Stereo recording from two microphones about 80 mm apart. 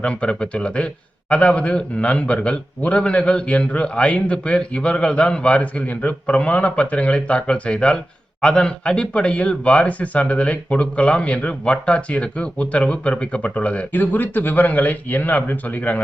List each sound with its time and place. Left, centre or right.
0.0 s speech: centre